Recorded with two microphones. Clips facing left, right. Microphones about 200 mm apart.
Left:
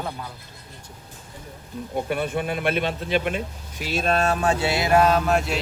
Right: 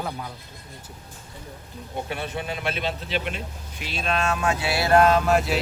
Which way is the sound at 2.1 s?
50° left (ahead or behind).